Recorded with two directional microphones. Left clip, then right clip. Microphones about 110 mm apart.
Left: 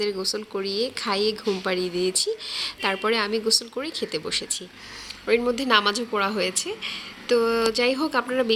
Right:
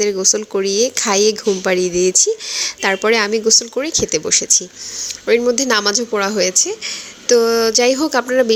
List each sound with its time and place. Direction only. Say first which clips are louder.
0.1 s speech: right 11 dB; 60° right (ahead or behind)
3.8 s speech: right 11 dB; 50° right (ahead or behind)
5.5 s speech: right 5 dB; 50° right (ahead or behind)